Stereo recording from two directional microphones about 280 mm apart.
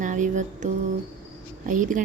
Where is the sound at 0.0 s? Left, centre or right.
Right.